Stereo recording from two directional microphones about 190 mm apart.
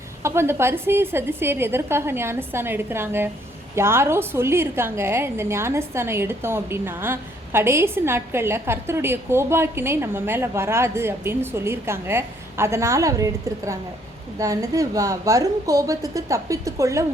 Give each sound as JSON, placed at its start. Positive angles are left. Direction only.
{"t": 0.2, "sound": "a woman's voice", "side_deg": -15}